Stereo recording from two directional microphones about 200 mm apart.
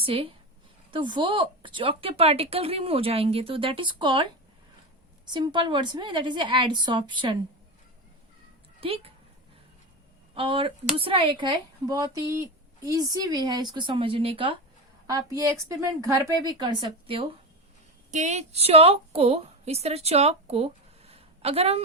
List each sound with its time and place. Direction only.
0.0 s speech: 30° right (ahead or behind)
8.8 s speech: 30° right (ahead or behind)
10.3 s a woman's voice: 25° right (ahead or behind)
18.1 s a woman's voice: 35° right (ahead or behind)